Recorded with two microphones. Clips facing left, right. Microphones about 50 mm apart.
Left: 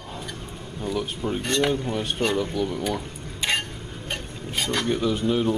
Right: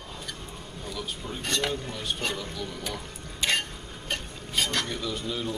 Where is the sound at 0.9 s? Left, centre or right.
Left.